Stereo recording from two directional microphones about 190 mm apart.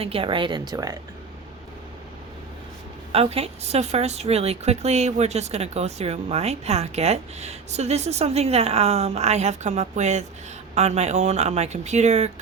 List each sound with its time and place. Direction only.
0.0 s speech: 30° right (ahead or behind)
3.1 s speech: 30° right (ahead or behind)